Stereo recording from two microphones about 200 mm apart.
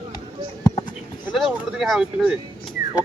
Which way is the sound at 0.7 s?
20° left (ahead or behind).